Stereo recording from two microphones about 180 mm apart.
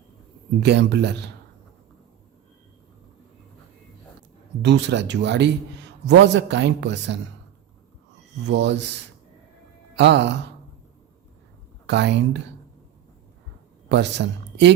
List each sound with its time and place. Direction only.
0.6 s a man's voice: 70° right (ahead or behind)
4.6 s a man's voice: 75° right (ahead or behind)
8.4 s a man's voice: 75° right (ahead or behind)
11.9 s a man's voice: 75° right (ahead or behind)
13.9 s speech: 75° right (ahead or behind)